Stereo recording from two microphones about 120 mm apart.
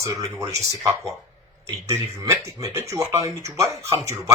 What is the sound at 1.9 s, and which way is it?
Speech, 25° right (ahead or behind).